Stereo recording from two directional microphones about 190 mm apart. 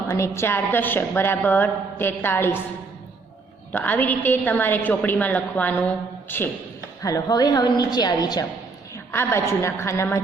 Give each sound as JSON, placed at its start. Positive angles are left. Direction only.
{"t": 0.1, "sound": "a woman's voice", "side_deg": 15}
{"t": 3.7, "sound": "a woman's voice", "side_deg": 10}